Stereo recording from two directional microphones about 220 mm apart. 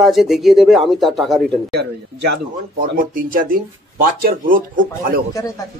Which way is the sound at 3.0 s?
40° right (ahead or behind).